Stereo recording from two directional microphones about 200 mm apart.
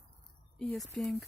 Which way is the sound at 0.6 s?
Centre (ahead or behind).